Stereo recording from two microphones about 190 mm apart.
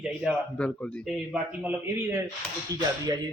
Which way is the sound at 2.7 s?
20° right (ahead or behind).